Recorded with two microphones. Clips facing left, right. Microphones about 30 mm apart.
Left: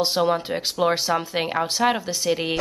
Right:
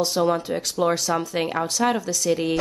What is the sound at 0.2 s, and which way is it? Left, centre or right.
Speech, left.